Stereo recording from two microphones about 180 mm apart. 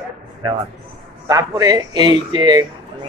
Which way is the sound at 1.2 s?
20° right (ahead or behind).